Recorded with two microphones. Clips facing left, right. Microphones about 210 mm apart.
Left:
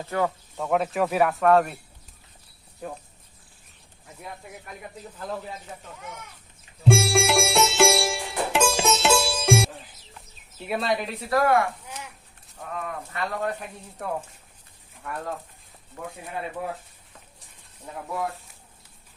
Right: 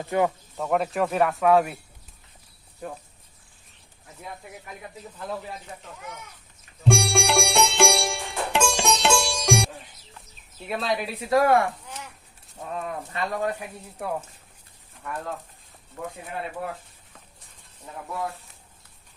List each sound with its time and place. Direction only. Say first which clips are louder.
0.0 s speech: right 3 dB; 20° right (ahead or behind)
0.5 s speech: even; centre (ahead or behind)
4.0 s speech: even; centre (ahead or behind)
6.8 s sitar: left 2 dB; 5° left (ahead or behind)
10.7 s speech: left 1 dB; centre (ahead or behind)
11.3 s speech: right 2 dB; 20° right (ahead or behind); by 15.3 s centre (ahead or behind)